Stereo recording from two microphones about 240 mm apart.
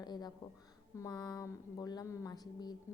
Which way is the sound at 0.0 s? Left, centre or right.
Centre.